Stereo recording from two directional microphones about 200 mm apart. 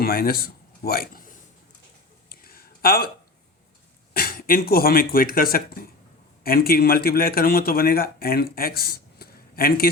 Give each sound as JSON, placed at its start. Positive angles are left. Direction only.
{"t": 0.0, "sound": "speech", "side_deg": 50}
{"t": 2.3, "sound": "a sound", "side_deg": 50}
{"t": 4.1, "sound": "a man's voice", "side_deg": 45}